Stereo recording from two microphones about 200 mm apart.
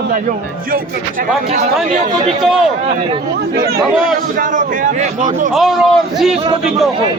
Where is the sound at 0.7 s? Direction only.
40° right (ahead or behind).